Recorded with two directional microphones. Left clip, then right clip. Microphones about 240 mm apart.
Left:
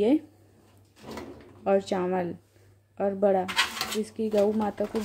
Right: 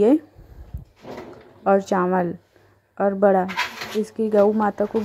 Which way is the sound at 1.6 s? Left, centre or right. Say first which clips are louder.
Right 7 dB; right.